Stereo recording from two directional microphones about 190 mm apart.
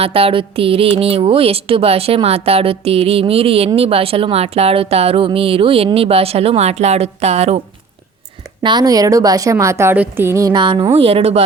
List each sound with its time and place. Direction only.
0.0 s speech: 30° right (ahead or behind)
8.6 s a woman's voice: 20° right (ahead or behind)